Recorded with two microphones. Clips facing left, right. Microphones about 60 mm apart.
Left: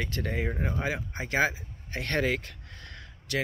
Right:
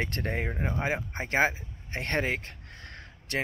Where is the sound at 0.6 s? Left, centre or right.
Right.